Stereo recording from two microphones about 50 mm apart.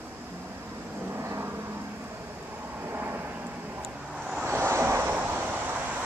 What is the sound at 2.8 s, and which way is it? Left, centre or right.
Thunder, right.